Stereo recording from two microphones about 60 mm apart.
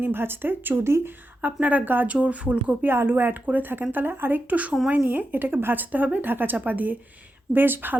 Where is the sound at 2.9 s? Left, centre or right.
Right.